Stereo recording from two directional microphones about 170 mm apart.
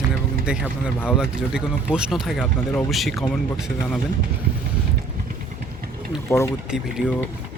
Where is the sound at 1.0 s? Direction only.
5° right (ahead or behind).